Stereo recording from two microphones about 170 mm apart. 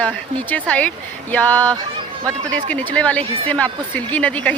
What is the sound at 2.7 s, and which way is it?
Speech, 10° left (ahead or behind).